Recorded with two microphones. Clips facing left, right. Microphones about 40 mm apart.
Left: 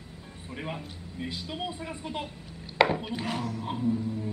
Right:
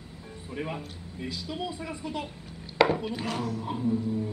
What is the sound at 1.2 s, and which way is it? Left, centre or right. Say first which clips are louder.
Speech: right 1 dB; centre.